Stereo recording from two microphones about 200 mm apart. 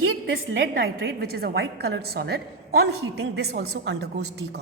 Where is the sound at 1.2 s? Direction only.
50° right (ahead or behind).